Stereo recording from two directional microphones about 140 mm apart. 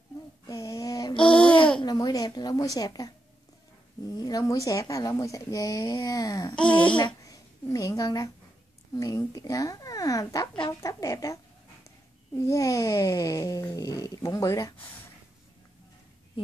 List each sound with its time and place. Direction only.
0.5 s a sound: 25° left (ahead or behind)
1.8 s speech: 30° left (ahead or behind)
4.2 s speech: 25° left (ahead or behind)
6.5 s speech: 10° left (ahead or behind)
7.0 s a child's voice: 30° left (ahead or behind)
12.4 s speech: 25° left (ahead or behind)